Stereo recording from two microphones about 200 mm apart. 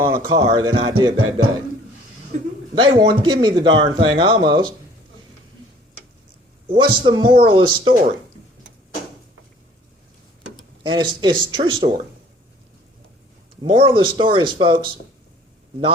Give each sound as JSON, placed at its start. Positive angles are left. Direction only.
{"t": 0.0, "sound": "speech", "side_deg": -15}
{"t": 2.7, "sound": "speech", "side_deg": -25}
{"t": 6.7, "sound": "speech", "side_deg": -25}
{"t": 10.8, "sound": "speech", "side_deg": -25}
{"t": 13.7, "sound": "speech", "side_deg": -25}